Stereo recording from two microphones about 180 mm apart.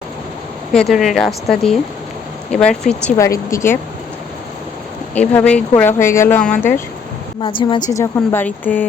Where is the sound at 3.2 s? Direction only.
15° left (ahead or behind).